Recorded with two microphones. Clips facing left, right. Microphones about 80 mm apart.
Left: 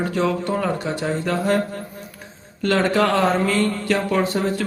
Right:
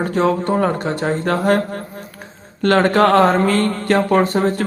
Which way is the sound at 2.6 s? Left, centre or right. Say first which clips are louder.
Right 5 dB; right.